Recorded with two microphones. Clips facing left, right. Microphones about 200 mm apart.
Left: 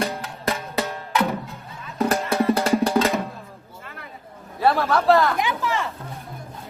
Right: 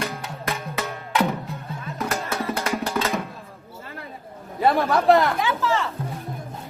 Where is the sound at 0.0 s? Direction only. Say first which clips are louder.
Left 4 dB; 30° left (ahead or behind).